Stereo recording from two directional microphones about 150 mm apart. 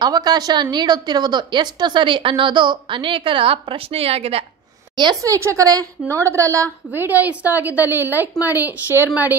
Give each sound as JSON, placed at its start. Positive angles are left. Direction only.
{"t": 0.0, "sound": "a woman's voice", "side_deg": -25}
{"t": 4.9, "sound": "a woman's voice", "side_deg": -25}